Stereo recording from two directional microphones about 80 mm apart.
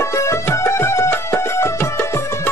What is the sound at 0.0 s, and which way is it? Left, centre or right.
Music, left.